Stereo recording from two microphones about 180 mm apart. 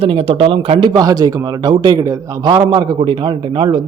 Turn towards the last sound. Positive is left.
turn(degrees=-25)  # may be behind; listen again after turning